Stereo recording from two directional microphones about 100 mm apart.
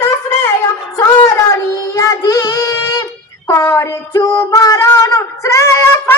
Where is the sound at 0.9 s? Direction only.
30° left (ahead or behind).